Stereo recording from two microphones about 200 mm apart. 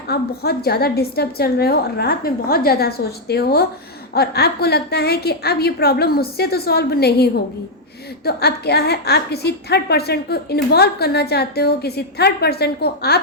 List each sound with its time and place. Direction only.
0.1 s a woman's voice: 50° left (ahead or behind)